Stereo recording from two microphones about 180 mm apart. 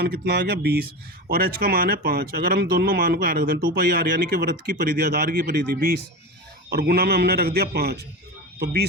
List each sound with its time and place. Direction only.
0.0 s speech: 60° right (ahead or behind)
5.4 s speech: 50° right (ahead or behind)